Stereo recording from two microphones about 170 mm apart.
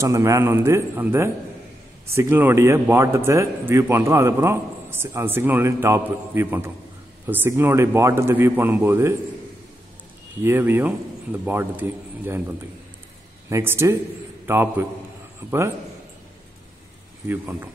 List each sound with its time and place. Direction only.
0.0 s speech: 20° right (ahead or behind)
10.4 s speech: 15° right (ahead or behind)
13.5 s a man's voice: 15° right (ahead or behind)
17.3 s speech: 15° right (ahead or behind)